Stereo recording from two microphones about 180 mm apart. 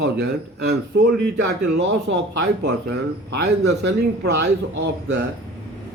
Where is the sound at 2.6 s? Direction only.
70° right (ahead or behind).